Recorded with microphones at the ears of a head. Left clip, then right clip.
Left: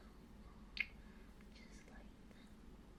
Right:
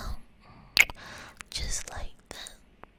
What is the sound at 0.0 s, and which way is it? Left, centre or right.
Whispering, right.